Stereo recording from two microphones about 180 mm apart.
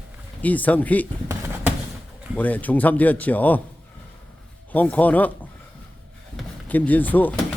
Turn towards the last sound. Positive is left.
turn(degrees=10)  # may be behind; listen again after turning